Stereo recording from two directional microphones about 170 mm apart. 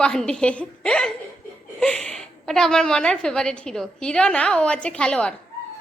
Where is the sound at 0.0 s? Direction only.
5° left (ahead or behind).